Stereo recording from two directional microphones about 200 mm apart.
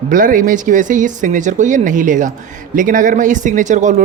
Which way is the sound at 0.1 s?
40° right (ahead or behind).